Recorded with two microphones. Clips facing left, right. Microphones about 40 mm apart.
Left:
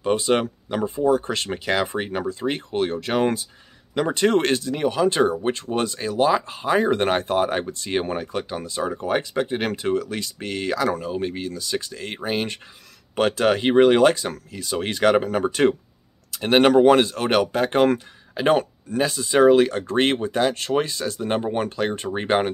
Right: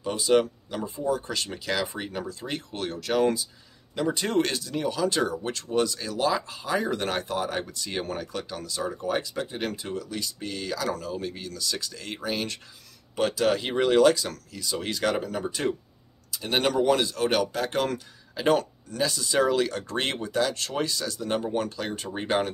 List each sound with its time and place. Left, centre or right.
0.0 s speech: left
13.1 s speech: left